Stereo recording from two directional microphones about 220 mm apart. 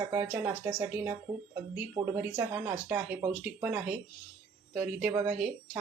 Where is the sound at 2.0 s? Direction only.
20° right (ahead or behind).